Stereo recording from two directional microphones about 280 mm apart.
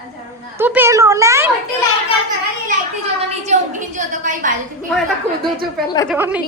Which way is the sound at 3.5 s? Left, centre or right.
Right.